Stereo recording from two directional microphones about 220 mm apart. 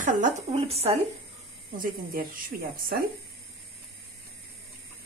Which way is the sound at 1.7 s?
40° right (ahead or behind).